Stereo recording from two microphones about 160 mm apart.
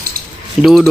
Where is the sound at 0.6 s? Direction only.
Centre (ahead or behind).